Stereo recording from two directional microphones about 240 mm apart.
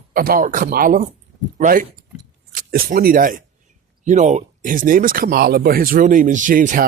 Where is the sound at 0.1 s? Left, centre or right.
Right.